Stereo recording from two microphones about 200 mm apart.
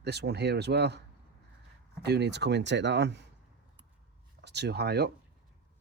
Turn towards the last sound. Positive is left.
turn(degrees=-55)  # may be behind; listen again after turning